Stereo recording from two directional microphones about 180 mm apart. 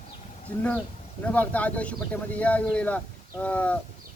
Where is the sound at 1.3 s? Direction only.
10° left (ahead or behind).